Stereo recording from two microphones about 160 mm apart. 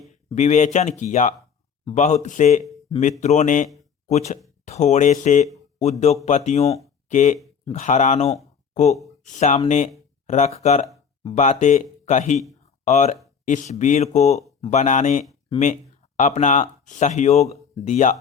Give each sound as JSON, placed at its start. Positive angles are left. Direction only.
{"t": 0.3, "sound": "speech", "side_deg": 45}